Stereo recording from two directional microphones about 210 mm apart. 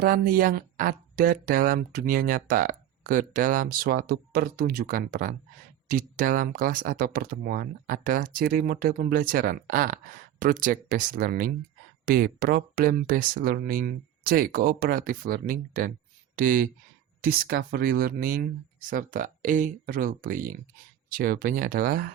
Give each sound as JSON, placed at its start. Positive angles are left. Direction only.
{"t": 0.0, "sound": "speech", "side_deg": -45}